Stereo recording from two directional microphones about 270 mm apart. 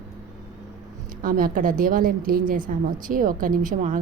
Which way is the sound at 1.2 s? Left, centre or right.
Right.